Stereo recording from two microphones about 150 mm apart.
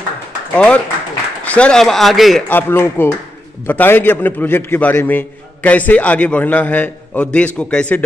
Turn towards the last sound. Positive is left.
turn(degrees=5)  # may be behind; listen again after turning